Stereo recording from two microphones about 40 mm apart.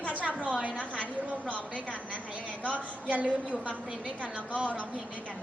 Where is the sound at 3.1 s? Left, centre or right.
Right.